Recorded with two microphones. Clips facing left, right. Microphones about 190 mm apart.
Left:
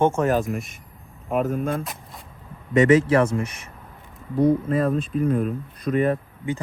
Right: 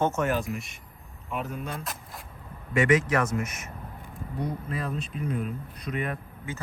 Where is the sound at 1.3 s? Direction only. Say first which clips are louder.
Left 10 dB; 45° left (ahead or behind).